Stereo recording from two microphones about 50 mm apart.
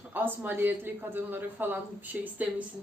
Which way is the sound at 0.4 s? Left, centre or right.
Right.